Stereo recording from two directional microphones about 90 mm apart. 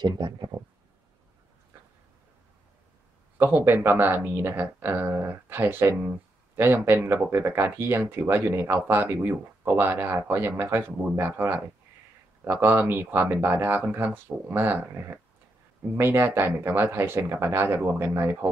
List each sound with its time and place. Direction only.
0.0 s speech: 55° right (ahead or behind)
3.3 s speech: 25° right (ahead or behind)